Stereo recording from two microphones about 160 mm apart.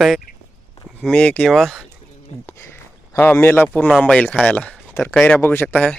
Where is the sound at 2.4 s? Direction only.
15° left (ahead or behind).